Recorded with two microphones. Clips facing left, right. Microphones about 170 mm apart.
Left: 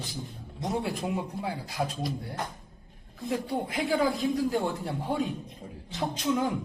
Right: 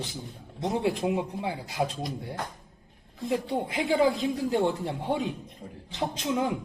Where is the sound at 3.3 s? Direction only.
20° right (ahead or behind).